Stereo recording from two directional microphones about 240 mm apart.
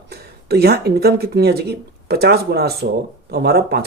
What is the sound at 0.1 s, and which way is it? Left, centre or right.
Speech, right.